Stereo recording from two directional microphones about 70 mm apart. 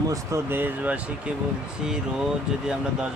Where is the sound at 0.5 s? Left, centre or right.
Right.